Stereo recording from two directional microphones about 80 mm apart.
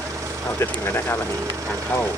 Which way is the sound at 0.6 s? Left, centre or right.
Left.